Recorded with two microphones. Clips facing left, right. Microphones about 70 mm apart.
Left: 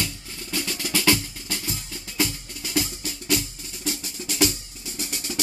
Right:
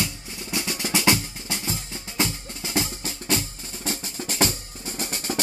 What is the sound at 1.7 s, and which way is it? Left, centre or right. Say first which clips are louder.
Drum: right 1 dB; right.